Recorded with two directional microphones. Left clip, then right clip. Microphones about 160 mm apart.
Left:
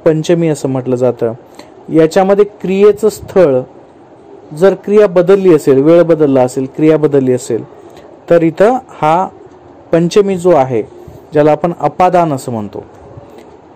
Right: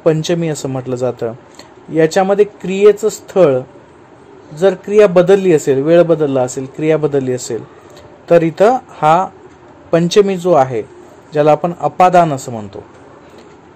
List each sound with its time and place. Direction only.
0.0 s a man's voice: 20° left (ahead or behind)